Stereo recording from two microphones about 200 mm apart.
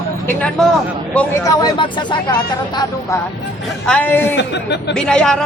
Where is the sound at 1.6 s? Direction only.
25° left (ahead or behind).